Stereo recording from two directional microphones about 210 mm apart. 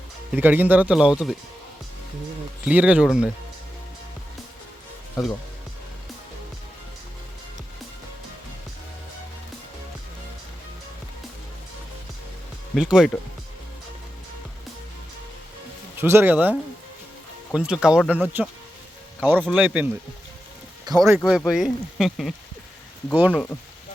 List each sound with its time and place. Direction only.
0.3 s a man's voice: 10° right (ahead or behind)
2.6 s speech: 5° right (ahead or behind)
5.2 s speech: centre (ahead or behind)
12.7 s speech: 5° right (ahead or behind)
16.0 s a man's voice: 10° right (ahead or behind)
21.2 s speech: centre (ahead or behind)